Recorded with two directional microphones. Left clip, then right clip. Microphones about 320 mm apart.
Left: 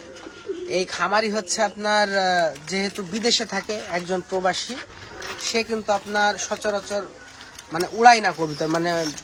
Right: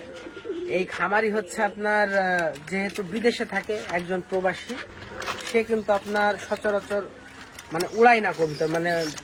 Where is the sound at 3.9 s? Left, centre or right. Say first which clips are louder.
Left 3 dB; centre.